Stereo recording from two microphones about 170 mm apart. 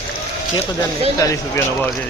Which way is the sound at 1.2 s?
20° left (ahead or behind).